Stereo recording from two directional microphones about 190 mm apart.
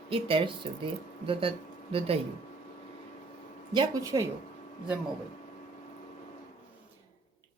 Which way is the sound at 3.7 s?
15° right (ahead or behind).